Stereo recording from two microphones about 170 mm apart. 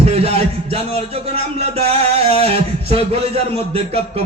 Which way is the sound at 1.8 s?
35° right (ahead or behind).